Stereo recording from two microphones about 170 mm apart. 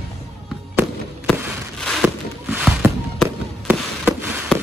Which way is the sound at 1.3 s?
15° right (ahead or behind).